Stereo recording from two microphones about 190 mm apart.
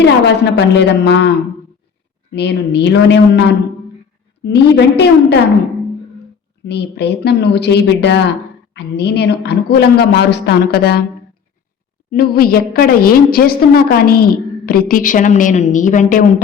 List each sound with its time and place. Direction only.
0.0 s a woman's voice: 65° left (ahead or behind)
2.3 s a woman's voice: 60° left (ahead or behind)
4.4 s a woman's voice: 65° left (ahead or behind)
6.7 s a woman's voice: 60° left (ahead or behind)
12.1 s a woman's voice: 55° left (ahead or behind)